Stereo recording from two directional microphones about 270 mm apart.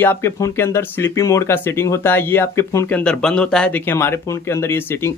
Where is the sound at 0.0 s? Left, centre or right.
Centre.